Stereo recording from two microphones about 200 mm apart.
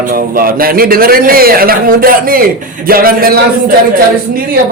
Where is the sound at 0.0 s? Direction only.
45° right (ahead or behind).